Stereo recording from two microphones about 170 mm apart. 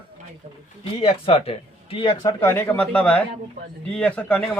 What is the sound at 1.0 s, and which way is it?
Speech, 35° left (ahead or behind).